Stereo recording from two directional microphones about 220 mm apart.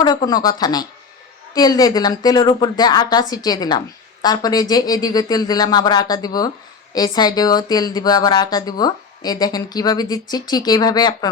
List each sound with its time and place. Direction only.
0.0 s speech: 20° left (ahead or behind)